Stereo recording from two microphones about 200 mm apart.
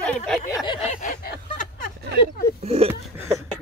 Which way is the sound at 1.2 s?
50° left (ahead or behind).